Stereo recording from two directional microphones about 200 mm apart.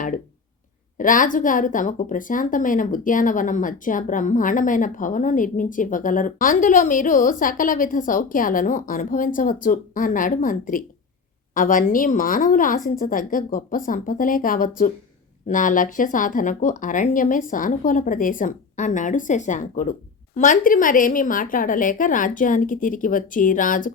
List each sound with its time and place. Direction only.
0.9 s a woman's voice: 40° left (ahead or behind)